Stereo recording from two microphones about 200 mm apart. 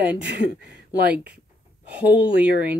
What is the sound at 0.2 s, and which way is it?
Speech, 60° right (ahead or behind).